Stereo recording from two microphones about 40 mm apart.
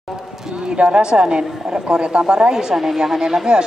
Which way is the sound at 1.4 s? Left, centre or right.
Centre.